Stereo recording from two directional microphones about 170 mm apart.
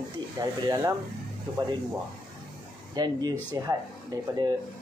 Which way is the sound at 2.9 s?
25° right (ahead or behind).